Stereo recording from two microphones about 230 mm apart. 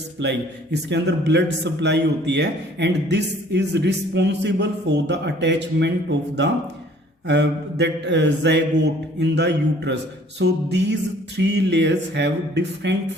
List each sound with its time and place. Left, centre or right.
0.2 s a man's voice: right